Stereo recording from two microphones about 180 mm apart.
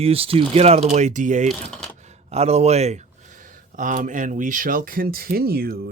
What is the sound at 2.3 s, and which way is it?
Speech, 35° right (ahead or behind).